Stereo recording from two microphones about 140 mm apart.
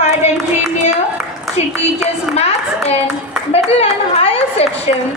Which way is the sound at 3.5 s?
45° left (ahead or behind).